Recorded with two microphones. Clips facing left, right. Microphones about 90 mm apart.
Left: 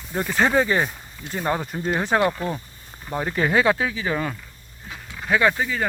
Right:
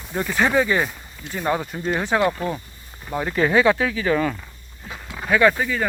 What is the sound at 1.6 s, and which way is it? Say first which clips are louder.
Speech: even; 10° left (ahead or behind).